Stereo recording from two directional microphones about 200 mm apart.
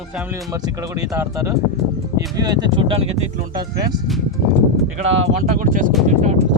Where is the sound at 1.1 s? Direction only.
15° right (ahead or behind).